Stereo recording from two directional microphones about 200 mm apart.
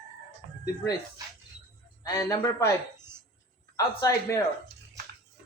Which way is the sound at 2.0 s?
15° left (ahead or behind).